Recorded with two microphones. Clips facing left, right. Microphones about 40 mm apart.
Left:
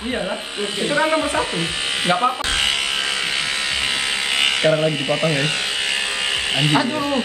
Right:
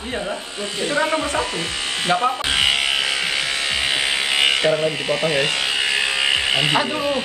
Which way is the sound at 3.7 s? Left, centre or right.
Centre.